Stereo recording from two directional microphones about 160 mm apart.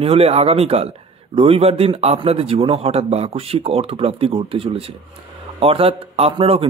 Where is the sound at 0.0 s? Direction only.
40° right (ahead or behind).